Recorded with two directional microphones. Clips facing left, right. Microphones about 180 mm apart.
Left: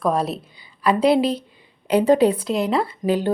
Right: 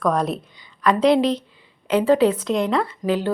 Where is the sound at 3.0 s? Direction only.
25° left (ahead or behind).